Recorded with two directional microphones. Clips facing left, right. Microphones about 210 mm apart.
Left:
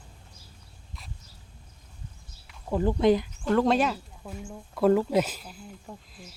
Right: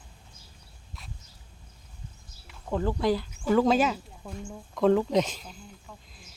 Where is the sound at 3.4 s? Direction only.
5° right (ahead or behind).